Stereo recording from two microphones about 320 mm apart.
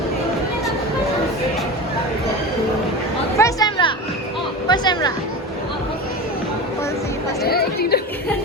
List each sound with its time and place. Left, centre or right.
3.3 s a sound: centre
4.7 s music: centre
7.4 s chatter: left